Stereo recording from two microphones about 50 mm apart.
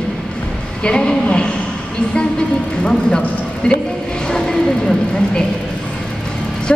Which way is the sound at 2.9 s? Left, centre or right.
Centre.